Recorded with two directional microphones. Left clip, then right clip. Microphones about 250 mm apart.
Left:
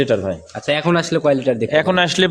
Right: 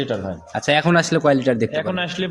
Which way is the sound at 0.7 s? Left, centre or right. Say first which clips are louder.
Even; centre.